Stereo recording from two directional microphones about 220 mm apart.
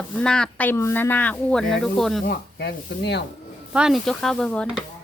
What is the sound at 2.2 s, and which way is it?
Speech, 50° left (ahead or behind).